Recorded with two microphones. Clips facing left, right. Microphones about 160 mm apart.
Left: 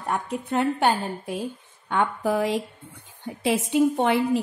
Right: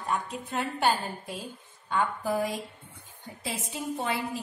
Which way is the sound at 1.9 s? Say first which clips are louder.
Left 5 dB; 70° left (ahead or behind).